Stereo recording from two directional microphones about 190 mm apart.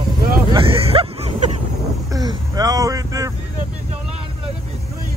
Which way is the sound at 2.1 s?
20° right (ahead or behind).